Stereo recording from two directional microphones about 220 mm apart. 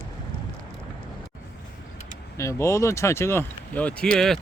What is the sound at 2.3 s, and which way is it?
Speech, 15° left (ahead or behind).